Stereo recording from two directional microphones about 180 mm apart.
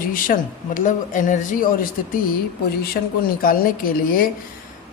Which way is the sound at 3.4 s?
55° left (ahead or behind).